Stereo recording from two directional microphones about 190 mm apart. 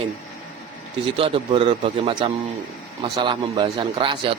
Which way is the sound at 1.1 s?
30° right (ahead or behind).